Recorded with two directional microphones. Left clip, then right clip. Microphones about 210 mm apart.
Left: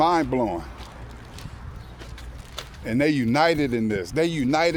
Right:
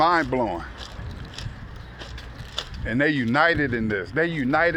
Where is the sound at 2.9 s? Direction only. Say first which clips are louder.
Even; 40° left (ahead or behind).